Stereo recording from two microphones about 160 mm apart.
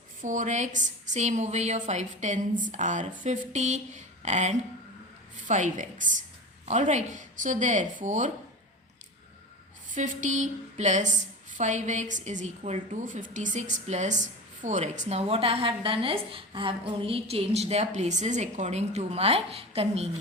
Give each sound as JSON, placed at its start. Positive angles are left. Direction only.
{"t": 0.2, "sound": "a woman's voice", "side_deg": -55}
{"t": 9.9, "sound": "a woman's voice", "side_deg": -50}